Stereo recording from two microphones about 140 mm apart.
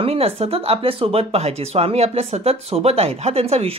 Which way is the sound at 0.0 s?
45° right (ahead or behind).